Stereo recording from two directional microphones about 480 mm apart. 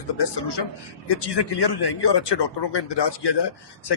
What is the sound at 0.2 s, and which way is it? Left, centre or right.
A man's voice, left.